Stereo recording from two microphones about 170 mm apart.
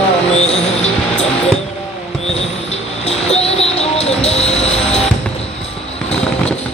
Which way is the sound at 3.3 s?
35° left (ahead or behind).